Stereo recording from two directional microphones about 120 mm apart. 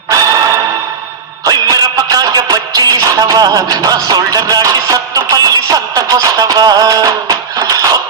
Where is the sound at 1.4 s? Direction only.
35° right (ahead or behind).